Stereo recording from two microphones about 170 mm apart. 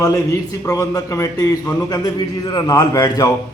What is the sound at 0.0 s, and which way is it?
A man's voice, 15° left (ahead or behind).